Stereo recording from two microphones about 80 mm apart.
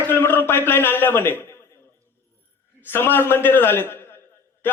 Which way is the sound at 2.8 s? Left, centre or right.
Left.